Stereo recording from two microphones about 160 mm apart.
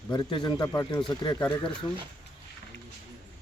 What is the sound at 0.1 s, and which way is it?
Speech, 30° left (ahead or behind).